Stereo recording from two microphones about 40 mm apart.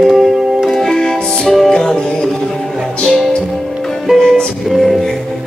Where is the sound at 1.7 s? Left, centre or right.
Centre.